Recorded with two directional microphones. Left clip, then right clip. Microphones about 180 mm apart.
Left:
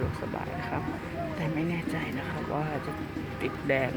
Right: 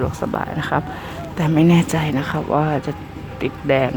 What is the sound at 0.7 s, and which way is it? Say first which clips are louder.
Speech: right 10 dB; 35° right (ahead or behind).